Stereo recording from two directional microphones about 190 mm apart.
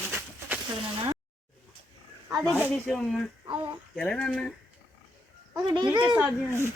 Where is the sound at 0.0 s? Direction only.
10° right (ahead or behind).